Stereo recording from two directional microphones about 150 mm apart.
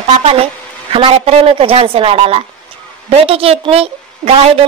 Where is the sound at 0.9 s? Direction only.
40° right (ahead or behind).